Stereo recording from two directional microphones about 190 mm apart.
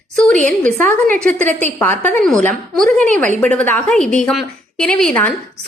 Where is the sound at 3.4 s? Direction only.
5° left (ahead or behind).